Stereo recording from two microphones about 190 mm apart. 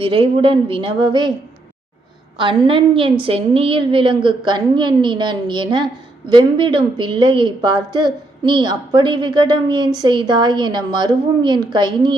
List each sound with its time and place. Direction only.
0.0 s a woman's voice: 30° right (ahead or behind)
2.4 s a woman's voice: 25° right (ahead or behind)